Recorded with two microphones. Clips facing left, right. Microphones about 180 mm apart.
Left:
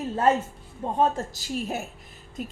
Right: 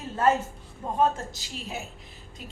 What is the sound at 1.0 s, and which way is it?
Speech, 40° left (ahead or behind).